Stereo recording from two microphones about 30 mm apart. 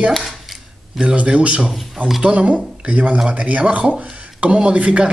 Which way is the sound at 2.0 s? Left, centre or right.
Right.